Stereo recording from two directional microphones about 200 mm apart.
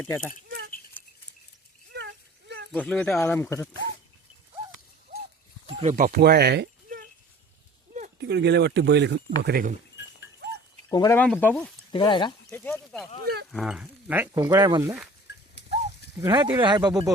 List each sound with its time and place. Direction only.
0.0 s speech: 10° left (ahead or behind)
1.9 s a sound: 55° right (ahead or behind)
2.7 s speech: 5° left (ahead or behind)
5.6 s speech: 30° right (ahead or behind); by 7.1 s 50° right (ahead or behind)
8.2 s speech: 60° right (ahead or behind)
9.4 s speech: 50° right (ahead or behind)
10.9 s speech: 20° left (ahead or behind)
11.9 s speech: 25° left (ahead or behind)
12.5 s speech: 5° left (ahead or behind)
13.2 s speech: 55° right (ahead or behind)
13.5 s speech: centre (ahead or behind); by 14.9 s 20° right (ahead or behind)
16.2 s speech: 20° right (ahead or behind)